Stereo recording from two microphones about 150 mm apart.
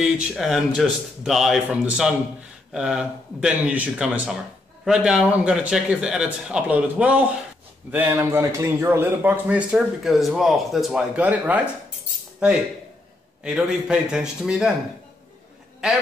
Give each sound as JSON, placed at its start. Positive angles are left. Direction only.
{"t": 0.0, "sound": "speech", "side_deg": -5}